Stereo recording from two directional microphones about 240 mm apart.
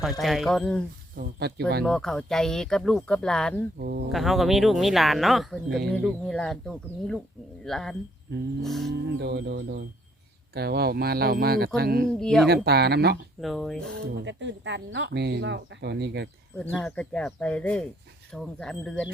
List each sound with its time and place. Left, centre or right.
0.0 s speech: centre
1.1 s speech: right
1.8 s speech: centre
3.8 s speech: right
4.1 s speech: centre
9.2 s speech: right
12.2 s speech: centre
12.5 s speech: right
13.4 s speech: centre
14.0 s speech: right
16.6 s speech: centre